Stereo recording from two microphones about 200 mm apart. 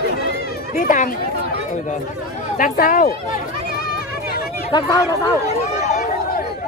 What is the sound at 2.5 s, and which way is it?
Speech, 45° left (ahead or behind).